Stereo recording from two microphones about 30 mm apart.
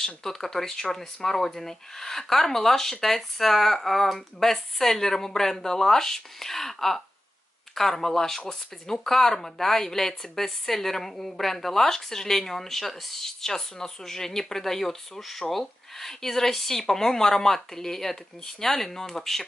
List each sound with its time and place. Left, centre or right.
0.0 s speech: centre